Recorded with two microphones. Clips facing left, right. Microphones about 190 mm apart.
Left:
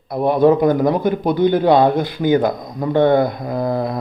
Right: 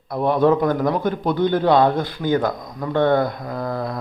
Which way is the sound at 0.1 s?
10° left (ahead or behind).